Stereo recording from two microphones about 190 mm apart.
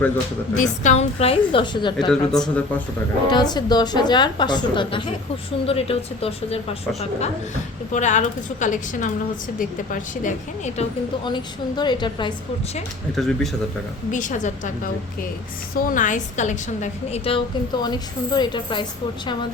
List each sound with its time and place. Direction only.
0.5 s a woman's voice: 40° left (ahead or behind); by 2.0 s 25° left (ahead or behind)
2.0 s a man's voice: 5° left (ahead or behind)
3.2 s a woman's voice: 20° left (ahead or behind)
7.9 s a woman's voice: 40° left (ahead or behind)
11.3 s a woman's voice: 25° left (ahead or behind)
13.1 s a man's voice: centre (ahead or behind)
14.1 s a woman's voice: 40° left (ahead or behind)
15.7 s a woman's voice: 45° left (ahead or behind); by 19.5 s 25° left (ahead or behind)